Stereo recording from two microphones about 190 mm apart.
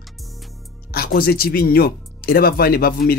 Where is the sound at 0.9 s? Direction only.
55° left (ahead or behind).